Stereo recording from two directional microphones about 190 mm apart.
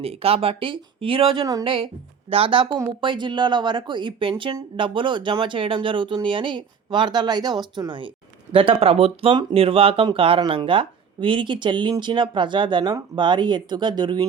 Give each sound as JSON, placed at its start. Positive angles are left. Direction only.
{"t": 0.0, "sound": "speech", "side_deg": -30}